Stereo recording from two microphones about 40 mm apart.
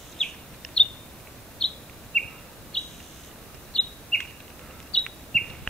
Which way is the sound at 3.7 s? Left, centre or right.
Centre.